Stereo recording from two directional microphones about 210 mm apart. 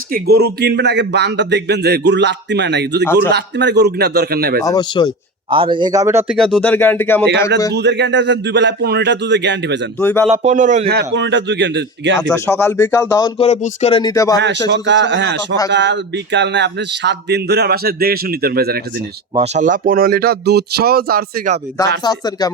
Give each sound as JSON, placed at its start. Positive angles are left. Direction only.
{"t": 0.1, "sound": "speech", "side_deg": -50}
{"t": 4.6, "sound": "speech", "side_deg": 20}
{"t": 5.5, "sound": "speech", "side_deg": -25}
{"t": 6.3, "sound": "speech", "side_deg": 5}
{"t": 7.7, "sound": "speech", "side_deg": -55}
{"t": 10.0, "sound": "speech", "side_deg": 10}
{"t": 10.3, "sound": "speech", "side_deg": -35}
{"t": 10.9, "sound": "speech", "side_deg": -60}
{"t": 12.3, "sound": "speech", "side_deg": 10}
{"t": 13.4, "sound": "speech", "side_deg": 30}
{"t": 14.0, "sound": "speech", "side_deg": 15}
{"t": 14.7, "sound": "speech", "side_deg": -55}
{"t": 19.4, "sound": "speech", "side_deg": -35}
{"t": 22.0, "sound": "speech", "side_deg": 20}